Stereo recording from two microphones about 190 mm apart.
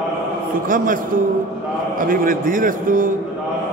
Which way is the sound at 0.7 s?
45° right (ahead or behind).